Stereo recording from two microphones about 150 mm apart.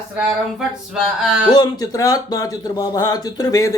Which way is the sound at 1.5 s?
25° left (ahead or behind).